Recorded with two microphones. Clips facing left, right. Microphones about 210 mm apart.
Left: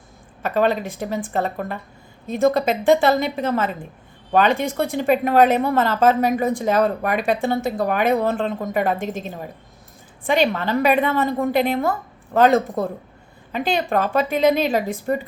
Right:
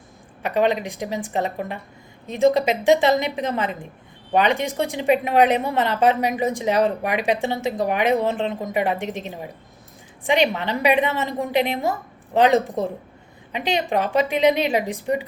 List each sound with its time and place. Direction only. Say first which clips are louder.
0.4 s a woman's voice: left 1 dB; 15° right (ahead or behind)